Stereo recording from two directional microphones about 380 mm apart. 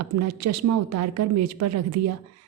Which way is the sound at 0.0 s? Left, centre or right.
Right.